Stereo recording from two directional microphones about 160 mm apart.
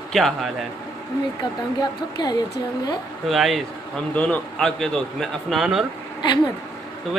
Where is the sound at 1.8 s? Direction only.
25° left (ahead or behind).